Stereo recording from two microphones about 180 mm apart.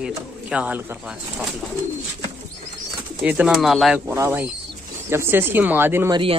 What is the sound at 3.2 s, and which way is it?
Speech, 5° right (ahead or behind).